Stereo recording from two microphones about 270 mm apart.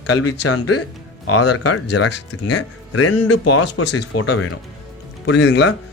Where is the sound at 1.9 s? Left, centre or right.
Left.